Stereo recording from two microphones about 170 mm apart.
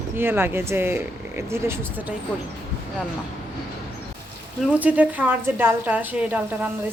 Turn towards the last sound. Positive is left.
turn(degrees=-10)  # may be behind; listen again after turning